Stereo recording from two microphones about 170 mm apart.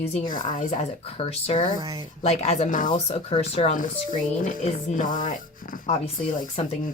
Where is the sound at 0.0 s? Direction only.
45° left (ahead or behind).